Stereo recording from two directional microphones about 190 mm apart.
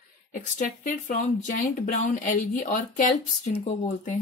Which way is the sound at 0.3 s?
40° left (ahead or behind).